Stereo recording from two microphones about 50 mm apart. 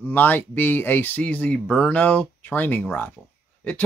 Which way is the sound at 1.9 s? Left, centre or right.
Left.